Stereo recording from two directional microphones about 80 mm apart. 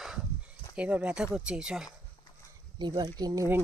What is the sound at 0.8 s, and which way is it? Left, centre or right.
Speech, centre.